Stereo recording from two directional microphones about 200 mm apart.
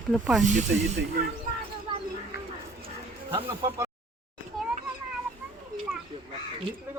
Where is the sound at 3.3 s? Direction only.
15° right (ahead or behind).